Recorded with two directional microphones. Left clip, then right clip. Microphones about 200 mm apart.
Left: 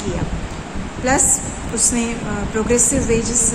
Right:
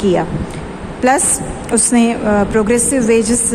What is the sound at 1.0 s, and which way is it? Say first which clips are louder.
A woman's voice: right 4 dB; 50° right (ahead or behind).